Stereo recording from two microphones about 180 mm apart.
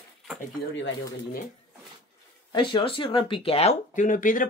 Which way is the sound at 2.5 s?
25° left (ahead or behind).